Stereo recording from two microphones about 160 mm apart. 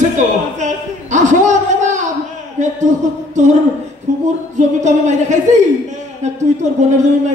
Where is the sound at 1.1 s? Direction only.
50° right (ahead or behind).